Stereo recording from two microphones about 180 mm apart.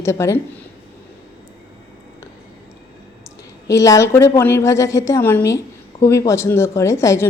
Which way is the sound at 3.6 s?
20° left (ahead or behind).